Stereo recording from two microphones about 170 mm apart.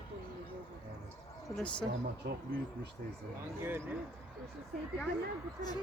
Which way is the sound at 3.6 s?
15° right (ahead or behind).